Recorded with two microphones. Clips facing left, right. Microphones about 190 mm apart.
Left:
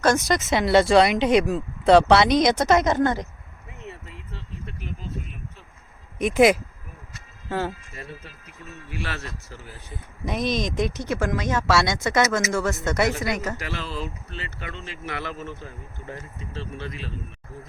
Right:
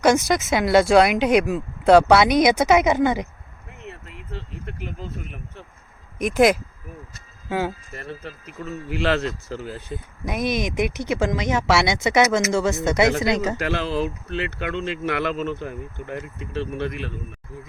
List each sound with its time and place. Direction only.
0.0 s speech: 10° right (ahead or behind)
6.1 s speech: centre (ahead or behind)
8.2 s a man's voice: 80° right
10.2 s speech: 5° right (ahead or behind)
13.1 s a man's voice: 80° right
13.3 s speech: 20° right (ahead or behind)
13.6 s speech: 60° right (ahead or behind)